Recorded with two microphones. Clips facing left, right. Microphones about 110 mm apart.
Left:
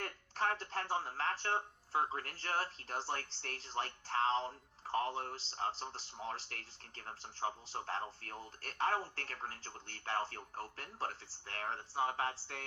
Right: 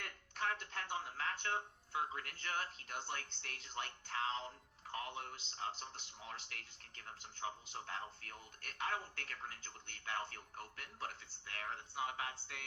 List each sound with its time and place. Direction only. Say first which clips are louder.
0.0 s speech: left 5 dB; 40° left (ahead or behind)